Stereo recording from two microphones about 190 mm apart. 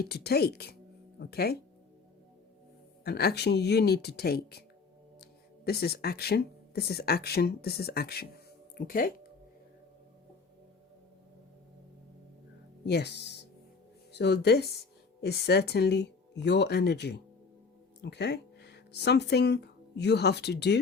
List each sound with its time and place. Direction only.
0.0 s speech: 55° left (ahead or behind)
3.0 s speech: 55° left (ahead or behind)
12.8 s speech: 60° left (ahead or behind)